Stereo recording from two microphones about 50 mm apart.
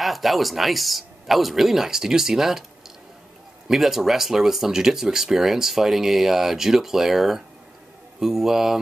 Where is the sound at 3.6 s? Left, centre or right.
Centre.